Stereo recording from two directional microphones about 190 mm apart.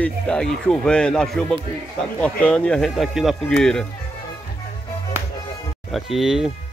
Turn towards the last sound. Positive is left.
turn(degrees=0)  # may be behind; listen again after turning